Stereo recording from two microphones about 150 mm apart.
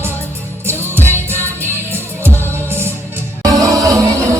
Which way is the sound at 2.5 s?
15° right (ahead or behind).